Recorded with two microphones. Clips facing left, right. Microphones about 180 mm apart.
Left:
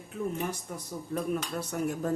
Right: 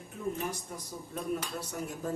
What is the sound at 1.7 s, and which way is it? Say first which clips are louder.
Speech: left 8 dB; 60° left (ahead or behind).